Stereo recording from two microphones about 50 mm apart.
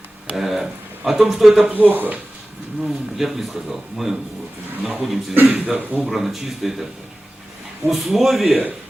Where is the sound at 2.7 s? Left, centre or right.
Centre.